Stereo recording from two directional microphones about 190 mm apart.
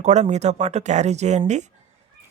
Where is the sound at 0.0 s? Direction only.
35° right (ahead or behind).